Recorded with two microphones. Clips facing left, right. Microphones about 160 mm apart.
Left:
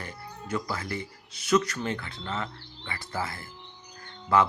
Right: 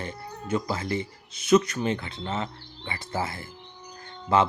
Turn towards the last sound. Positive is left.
turn(degrees=-20)  # may be behind; listen again after turning